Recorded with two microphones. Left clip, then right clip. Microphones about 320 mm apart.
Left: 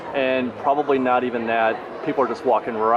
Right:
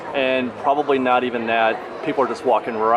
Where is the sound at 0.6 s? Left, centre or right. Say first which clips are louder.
Right 1 dB; right.